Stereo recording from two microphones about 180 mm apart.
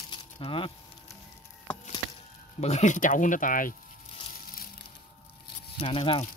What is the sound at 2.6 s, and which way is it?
Speech, 40° left (ahead or behind).